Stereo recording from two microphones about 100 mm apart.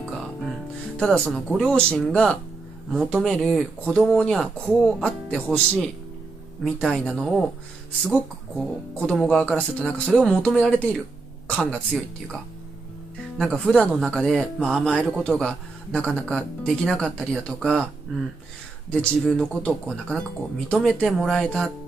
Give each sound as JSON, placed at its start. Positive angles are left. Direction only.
{"t": 0.9, "sound": "a man's voice", "side_deg": 10}
{"t": 13.4, "sound": "a man's voice", "side_deg": 5}
{"t": 18.9, "sound": "speech", "side_deg": 10}